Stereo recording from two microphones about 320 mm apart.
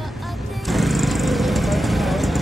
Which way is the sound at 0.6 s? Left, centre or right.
Centre.